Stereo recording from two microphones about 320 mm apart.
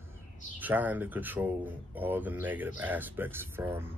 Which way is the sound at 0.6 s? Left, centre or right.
Centre.